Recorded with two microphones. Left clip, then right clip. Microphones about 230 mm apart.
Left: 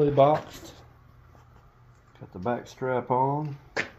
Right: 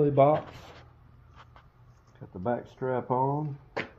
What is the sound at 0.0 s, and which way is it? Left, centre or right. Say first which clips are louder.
Speech: left 2 dB; centre.